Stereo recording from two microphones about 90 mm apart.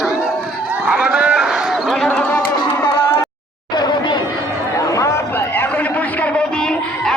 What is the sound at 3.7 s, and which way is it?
Chatter, 55° left (ahead or behind).